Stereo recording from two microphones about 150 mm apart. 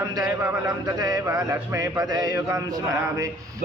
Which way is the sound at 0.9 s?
25° right (ahead or behind).